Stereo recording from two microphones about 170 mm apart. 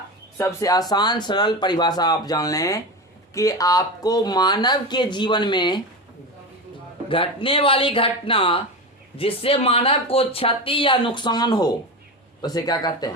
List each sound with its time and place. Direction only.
0.3 s speech: 20° left (ahead or behind)
7.1 s speech: 30° left (ahead or behind)